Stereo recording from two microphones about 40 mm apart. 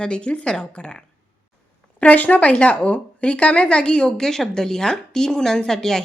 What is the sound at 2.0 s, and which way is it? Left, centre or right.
Speech, left.